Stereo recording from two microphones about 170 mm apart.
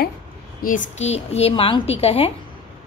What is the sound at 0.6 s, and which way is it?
A woman's voice, 50° left (ahead or behind).